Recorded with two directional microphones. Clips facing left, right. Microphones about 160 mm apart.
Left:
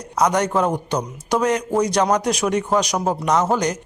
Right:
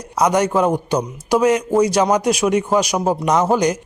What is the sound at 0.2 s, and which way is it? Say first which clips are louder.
A man's voice: right 2 dB; 10° right (ahead or behind).